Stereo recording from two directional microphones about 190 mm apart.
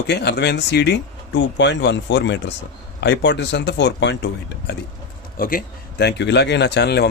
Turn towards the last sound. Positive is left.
turn(degrees=60)  # may be behind; listen again after turning